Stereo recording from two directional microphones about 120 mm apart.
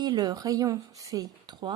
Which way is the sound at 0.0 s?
35° right (ahead or behind).